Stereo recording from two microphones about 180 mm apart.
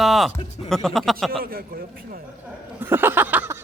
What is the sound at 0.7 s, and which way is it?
Speech, 5° left (ahead or behind).